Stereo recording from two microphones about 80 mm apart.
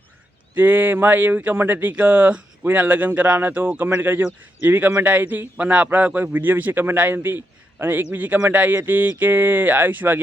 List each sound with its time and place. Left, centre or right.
0.5 s speech: right